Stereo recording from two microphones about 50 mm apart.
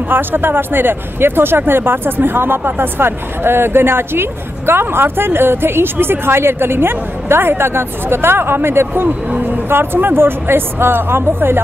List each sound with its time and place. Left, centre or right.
0.1 s speech: right